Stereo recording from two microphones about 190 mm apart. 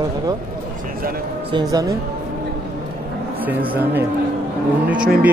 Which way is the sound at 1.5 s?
20° right (ahead or behind).